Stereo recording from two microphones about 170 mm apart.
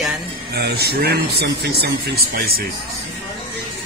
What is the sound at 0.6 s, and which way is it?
Speech, 70° right (ahead or behind).